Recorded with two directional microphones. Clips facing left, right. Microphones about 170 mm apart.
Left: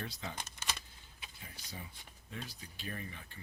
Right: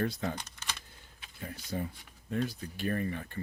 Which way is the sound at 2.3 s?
55° right (ahead or behind).